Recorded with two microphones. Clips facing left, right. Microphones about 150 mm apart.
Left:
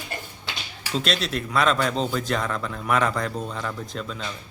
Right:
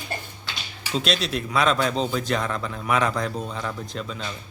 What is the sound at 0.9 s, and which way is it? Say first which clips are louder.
Speech: right 1 dB; centre (ahead or behind).